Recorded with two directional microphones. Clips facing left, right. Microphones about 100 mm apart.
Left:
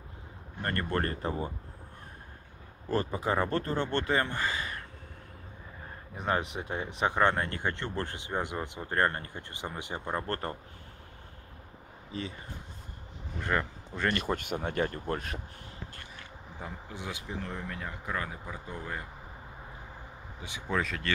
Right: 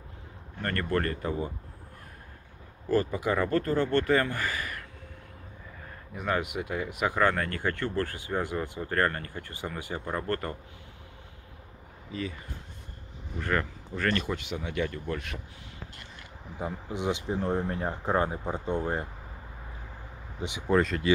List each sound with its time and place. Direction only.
0.6 s speech: 25° left (ahead or behind)
2.9 s speech: 30° left (ahead or behind)
6.1 s speech: 30° left (ahead or behind)
12.1 s speech: 30° left (ahead or behind)
13.4 s speech: 20° left (ahead or behind)
14.1 s speech: 45° left (ahead or behind)
16.5 s speech: 20° right (ahead or behind)
17.3 s speech: 30° right (ahead or behind)
20.3 s speech: 20° right (ahead or behind)
20.6 s speech: centre (ahead or behind)